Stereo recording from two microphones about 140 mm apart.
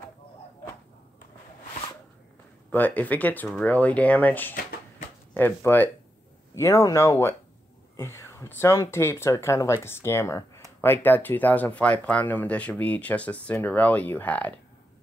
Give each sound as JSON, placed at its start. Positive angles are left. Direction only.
{"t": 2.7, "sound": "speech", "side_deg": 10}